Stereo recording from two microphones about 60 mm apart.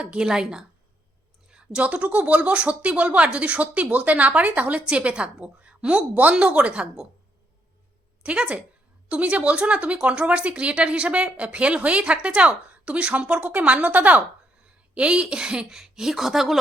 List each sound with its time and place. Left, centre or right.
0.0 s speech: centre
8.2 s speech: centre